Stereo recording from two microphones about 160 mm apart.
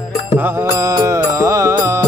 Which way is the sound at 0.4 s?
15° right (ahead or behind).